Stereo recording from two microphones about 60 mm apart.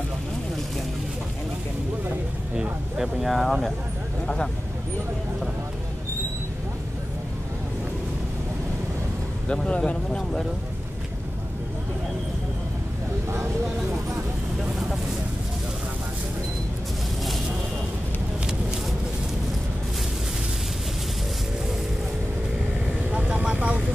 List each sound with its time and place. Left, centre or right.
2.5 s vehicle: centre
3.2 s speech: centre
9.5 s speech: centre
23.1 s vehicle: centre